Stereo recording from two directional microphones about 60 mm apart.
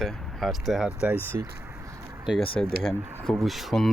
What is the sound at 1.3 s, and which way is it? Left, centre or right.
Speech, right.